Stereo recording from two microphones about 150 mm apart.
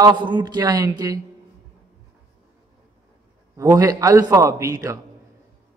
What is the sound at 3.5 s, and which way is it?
A man's voice, 20° right (ahead or behind).